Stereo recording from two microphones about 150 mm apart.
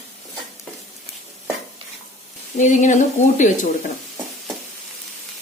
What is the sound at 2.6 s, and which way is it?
Sizzle, 55° left (ahead or behind).